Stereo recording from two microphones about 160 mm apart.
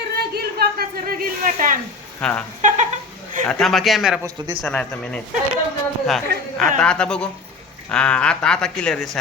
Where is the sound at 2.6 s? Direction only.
55° right (ahead or behind).